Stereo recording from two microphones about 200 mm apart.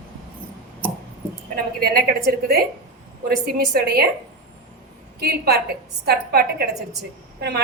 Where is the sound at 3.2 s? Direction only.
50° right (ahead or behind).